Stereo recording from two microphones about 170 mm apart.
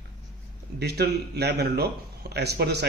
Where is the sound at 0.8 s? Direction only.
75° right (ahead or behind).